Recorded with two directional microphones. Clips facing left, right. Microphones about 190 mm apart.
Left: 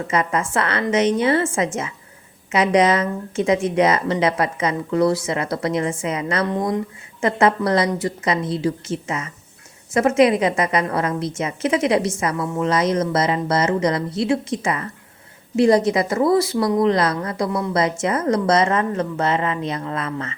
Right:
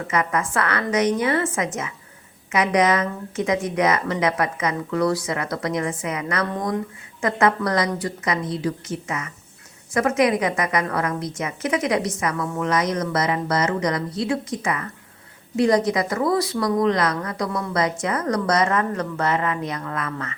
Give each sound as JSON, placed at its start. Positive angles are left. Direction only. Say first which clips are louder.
{"t": 0.1, "sound": "a woman's voice", "louder": "left 2 dB", "side_deg": 25}